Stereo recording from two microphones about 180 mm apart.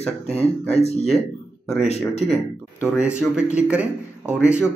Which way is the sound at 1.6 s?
5° left (ahead or behind).